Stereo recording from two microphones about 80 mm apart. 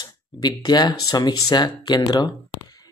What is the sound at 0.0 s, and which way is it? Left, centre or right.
Speech, left.